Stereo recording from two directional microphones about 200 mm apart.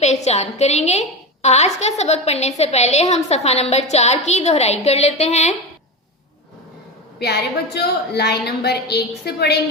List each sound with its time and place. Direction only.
0.0 s a woman's voice: 35° left (ahead or behind)
7.2 s a woman's voice: 55° left (ahead or behind)